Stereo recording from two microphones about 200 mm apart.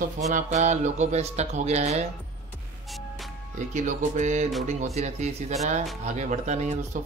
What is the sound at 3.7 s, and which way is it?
Speech, 35° right (ahead or behind).